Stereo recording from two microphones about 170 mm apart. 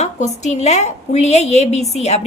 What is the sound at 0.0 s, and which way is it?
A woman's voice, 40° left (ahead or behind).